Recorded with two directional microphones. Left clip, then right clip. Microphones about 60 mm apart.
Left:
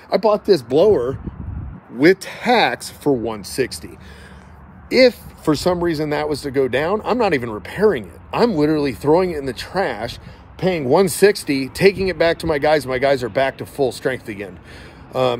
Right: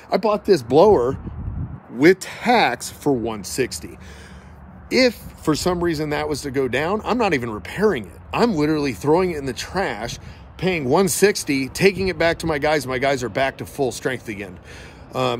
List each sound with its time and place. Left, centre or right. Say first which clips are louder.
0.1 s speech: left 3 dB; right
0.7 s speech: right 3 dB; right
2.0 s speech: left 1 dB; right
5.4 s speech: left 3 dB; right
10.6 s speech: left 3 dB; right